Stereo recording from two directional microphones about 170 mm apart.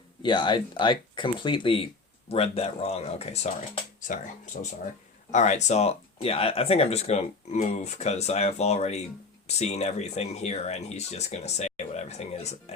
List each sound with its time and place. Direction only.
0.2 s speech: 25° left (ahead or behind)
4.5 s speech: 50° left (ahead or behind)